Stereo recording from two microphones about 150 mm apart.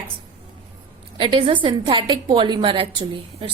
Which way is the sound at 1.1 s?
35° right (ahead or behind).